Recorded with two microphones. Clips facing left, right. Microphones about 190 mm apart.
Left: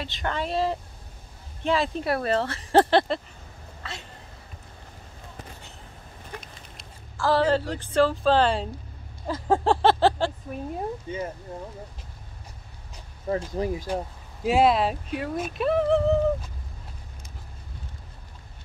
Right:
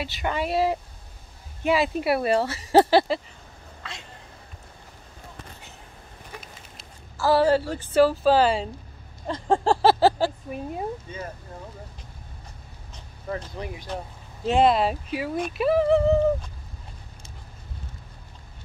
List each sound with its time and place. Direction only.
0.0 s speech: 10° right (ahead or behind)
6.4 s speech: 5° right (ahead or behind)
11.1 s speech: 20° left (ahead or behind)
13.6 s speech: 40° left (ahead or behind)
14.4 s speech: 5° left (ahead or behind)